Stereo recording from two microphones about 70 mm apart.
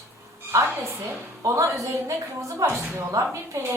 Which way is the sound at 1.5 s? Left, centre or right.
Right.